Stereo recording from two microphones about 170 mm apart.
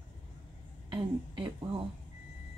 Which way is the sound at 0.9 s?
25° right (ahead or behind).